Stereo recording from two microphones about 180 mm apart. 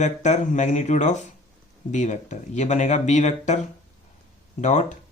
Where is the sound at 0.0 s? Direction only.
40° left (ahead or behind).